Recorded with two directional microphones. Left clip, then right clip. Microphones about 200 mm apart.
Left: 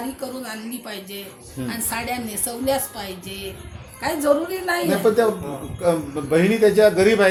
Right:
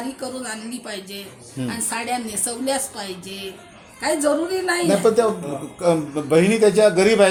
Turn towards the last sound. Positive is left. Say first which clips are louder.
# right 1 dB
turn(degrees=-35)  # may be behind; listen again after turning